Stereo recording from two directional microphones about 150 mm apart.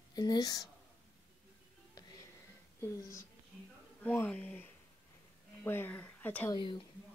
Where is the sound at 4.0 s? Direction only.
10° left (ahead or behind).